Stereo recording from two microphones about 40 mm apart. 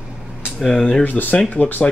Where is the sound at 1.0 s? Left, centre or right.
Left.